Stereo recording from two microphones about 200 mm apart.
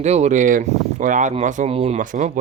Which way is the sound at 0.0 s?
35° right (ahead or behind).